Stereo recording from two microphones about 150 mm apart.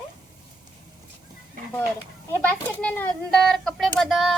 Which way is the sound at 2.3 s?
10° left (ahead or behind).